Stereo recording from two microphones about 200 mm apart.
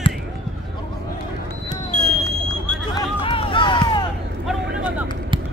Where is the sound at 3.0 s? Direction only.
25° left (ahead or behind).